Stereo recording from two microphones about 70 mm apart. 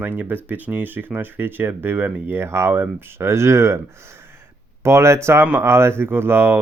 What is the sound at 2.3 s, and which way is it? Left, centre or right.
Speech, right.